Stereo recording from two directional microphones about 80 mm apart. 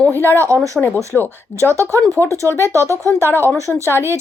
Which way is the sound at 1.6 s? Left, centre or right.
Right.